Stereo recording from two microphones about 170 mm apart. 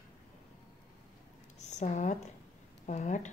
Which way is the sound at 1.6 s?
45° left (ahead or behind).